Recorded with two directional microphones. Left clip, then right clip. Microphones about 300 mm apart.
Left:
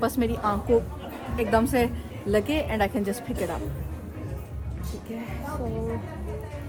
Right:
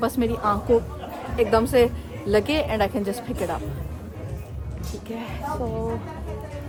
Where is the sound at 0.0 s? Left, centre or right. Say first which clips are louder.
Right 2 dB; centre.